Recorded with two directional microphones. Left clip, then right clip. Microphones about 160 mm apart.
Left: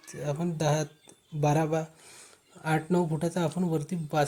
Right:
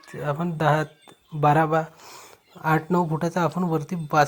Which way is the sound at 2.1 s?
10° right (ahead or behind).